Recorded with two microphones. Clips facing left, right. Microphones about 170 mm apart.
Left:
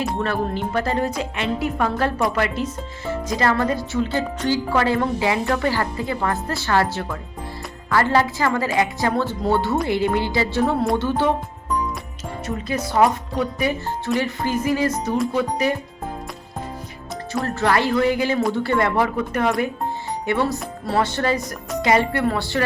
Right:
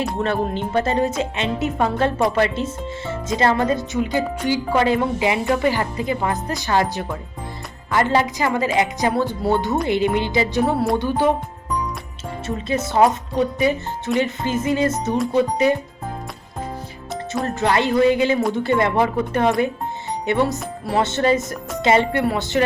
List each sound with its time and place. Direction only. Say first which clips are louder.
0.2 s a woman's voice: right 2 dB; 25° right (ahead or behind)
12.5 s a woman's voice: right 2 dB; 25° right (ahead or behind)
17.4 s a woman's voice: even; 20° right (ahead or behind)